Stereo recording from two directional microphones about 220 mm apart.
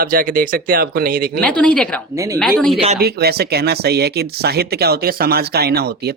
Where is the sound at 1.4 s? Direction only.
5° left (ahead or behind).